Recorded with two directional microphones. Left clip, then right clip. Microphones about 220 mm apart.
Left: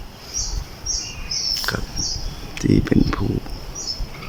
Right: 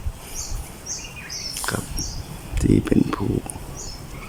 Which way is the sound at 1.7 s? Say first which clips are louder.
Left 2 dB; 5° right (ahead or behind).